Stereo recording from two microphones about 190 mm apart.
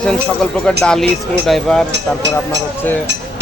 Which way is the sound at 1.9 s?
65° right (ahead or behind).